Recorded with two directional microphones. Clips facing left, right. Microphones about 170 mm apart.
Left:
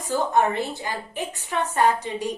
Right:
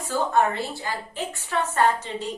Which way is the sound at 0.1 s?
20° left (ahead or behind).